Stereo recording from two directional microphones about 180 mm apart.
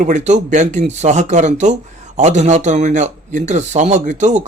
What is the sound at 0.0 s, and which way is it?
Speech, 40° right (ahead or behind).